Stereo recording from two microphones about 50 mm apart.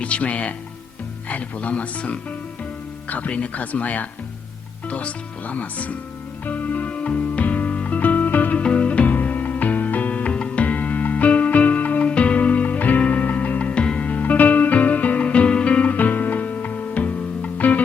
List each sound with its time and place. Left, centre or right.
0.0 s speech: left
6.4 s music: left
8.6 s music: left